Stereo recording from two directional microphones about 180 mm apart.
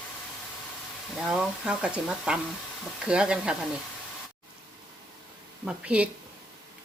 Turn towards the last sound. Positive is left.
turn(degrees=-5)  # may be behind; listen again after turning